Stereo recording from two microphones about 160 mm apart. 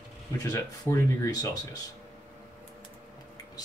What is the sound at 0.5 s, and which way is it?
Speech, 20° left (ahead or behind).